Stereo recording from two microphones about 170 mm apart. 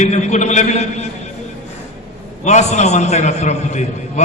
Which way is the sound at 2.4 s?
40° left (ahead or behind).